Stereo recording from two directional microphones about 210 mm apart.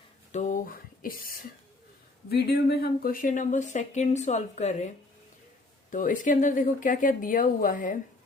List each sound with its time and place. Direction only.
0.3 s a sound: 35° left (ahead or behind)
2.3 s speech: 50° left (ahead or behind); by 4.9 s 35° left (ahead or behind)
5.9 s speech: 40° left (ahead or behind)